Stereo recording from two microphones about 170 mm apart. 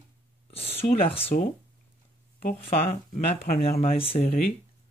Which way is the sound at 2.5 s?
35° left (ahead or behind).